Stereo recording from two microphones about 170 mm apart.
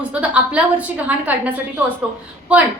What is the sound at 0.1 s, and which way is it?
A woman's voice, 10° right (ahead or behind).